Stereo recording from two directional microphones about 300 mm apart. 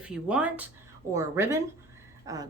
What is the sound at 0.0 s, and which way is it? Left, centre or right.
A woman's voice, centre.